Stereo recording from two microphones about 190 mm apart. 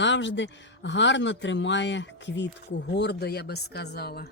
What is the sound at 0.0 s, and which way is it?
Speech, 70° left (ahead or behind).